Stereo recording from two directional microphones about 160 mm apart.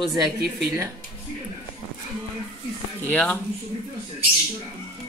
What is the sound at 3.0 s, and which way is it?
Speech, 10° left (ahead or behind).